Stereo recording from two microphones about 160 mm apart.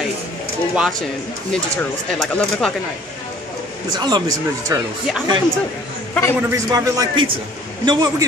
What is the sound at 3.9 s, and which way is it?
Speech, 25° right (ahead or behind).